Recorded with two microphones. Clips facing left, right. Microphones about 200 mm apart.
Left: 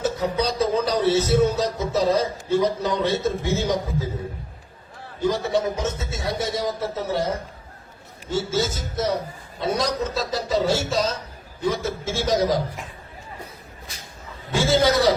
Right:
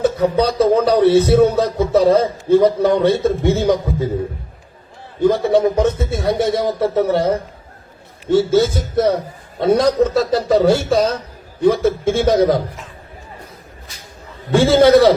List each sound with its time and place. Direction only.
0.0 s speech: 60° right (ahead or behind)
5.2 s a man's voice: 60° right (ahead or behind)
14.5 s a man's voice: 60° right (ahead or behind)